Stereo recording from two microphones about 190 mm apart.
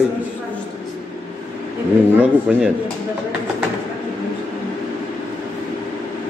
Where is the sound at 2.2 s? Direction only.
5° right (ahead or behind).